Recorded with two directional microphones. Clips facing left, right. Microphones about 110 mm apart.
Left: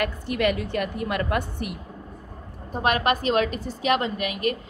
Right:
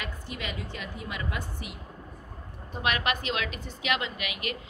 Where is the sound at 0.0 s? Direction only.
60° left (ahead or behind).